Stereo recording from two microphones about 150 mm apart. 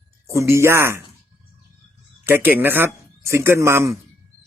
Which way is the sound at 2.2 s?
15° right (ahead or behind).